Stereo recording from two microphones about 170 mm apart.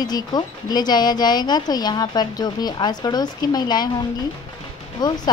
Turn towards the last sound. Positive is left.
turn(degrees=25)  # may be behind; listen again after turning